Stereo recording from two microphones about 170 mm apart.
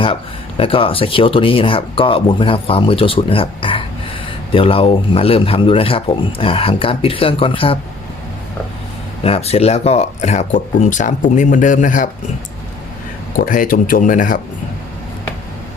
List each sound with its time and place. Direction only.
0.0 s speech: 30° left (ahead or behind)
9.2 s speech: 35° left (ahead or behind)
13.3 s speech: 55° left (ahead or behind)